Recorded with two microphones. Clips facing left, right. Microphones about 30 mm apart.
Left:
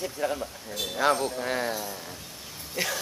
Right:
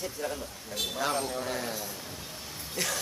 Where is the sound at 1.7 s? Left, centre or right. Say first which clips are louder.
Left 4 dB; centre.